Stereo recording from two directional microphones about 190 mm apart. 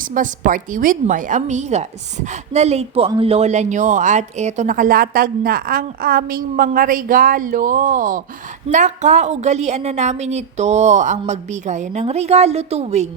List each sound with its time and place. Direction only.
0.1 s a woman's voice: 45° right (ahead or behind)